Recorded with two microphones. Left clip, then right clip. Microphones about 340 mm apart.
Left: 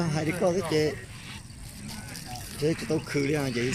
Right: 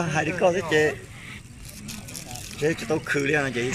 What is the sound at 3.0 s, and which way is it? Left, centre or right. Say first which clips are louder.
Speech: right 8 dB; right.